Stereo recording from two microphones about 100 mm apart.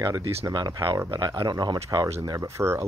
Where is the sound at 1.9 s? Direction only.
30° right (ahead or behind).